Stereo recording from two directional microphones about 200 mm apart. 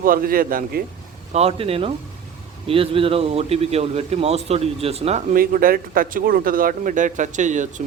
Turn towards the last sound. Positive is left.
turn(degrees=-40)  # may be behind; listen again after turning